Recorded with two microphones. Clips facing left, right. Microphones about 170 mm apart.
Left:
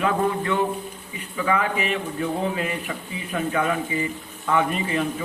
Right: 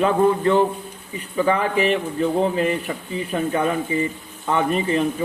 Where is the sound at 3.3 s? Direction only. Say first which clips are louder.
Right 2 dB; 30° right (ahead or behind).